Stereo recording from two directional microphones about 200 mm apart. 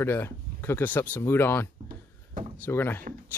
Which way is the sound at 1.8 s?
45° right (ahead or behind).